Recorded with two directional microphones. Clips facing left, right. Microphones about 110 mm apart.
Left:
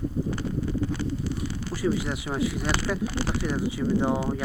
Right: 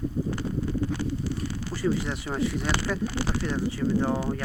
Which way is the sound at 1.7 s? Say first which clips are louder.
Left 1 dB; 10° left (ahead or behind).